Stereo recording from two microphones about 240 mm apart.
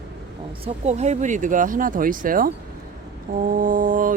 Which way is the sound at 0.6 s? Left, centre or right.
Right.